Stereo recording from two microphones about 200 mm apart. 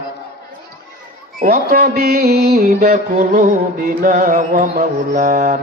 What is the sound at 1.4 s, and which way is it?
Mantra, 45° right (ahead or behind).